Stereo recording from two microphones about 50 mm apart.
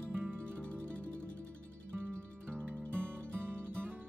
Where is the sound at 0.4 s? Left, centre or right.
Left.